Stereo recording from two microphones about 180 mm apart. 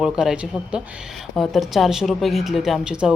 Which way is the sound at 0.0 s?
5° right (ahead or behind).